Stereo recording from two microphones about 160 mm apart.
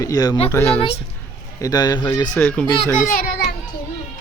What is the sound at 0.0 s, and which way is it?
Speech, 20° left (ahead or behind).